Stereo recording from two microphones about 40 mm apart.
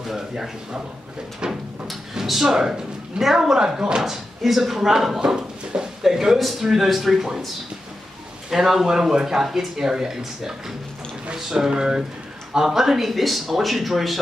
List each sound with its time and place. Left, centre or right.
0.0 s a sound: centre
2.1 s speech: centre
8.5 s speech: centre